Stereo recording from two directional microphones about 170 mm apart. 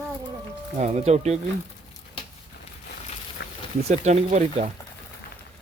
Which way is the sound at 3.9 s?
40° right (ahead or behind).